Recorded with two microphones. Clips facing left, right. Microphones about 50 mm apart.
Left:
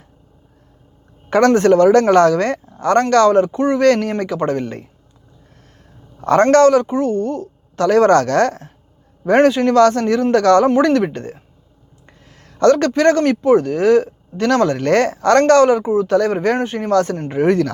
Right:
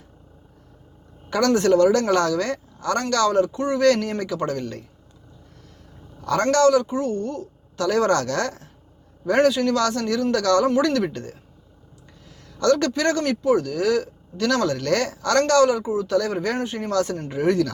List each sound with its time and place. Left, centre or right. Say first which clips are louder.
1.3 s speech: left 6 dB; left
6.1 s speech: left 8 dB; left
12.5 s speech: left 7 dB; left